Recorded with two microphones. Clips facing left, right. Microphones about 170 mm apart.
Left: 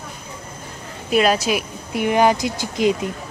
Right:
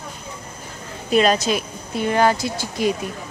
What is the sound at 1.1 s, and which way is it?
Speech, 5° left (ahead or behind).